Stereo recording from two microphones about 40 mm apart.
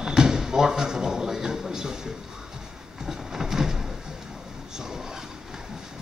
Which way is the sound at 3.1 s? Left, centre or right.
Centre.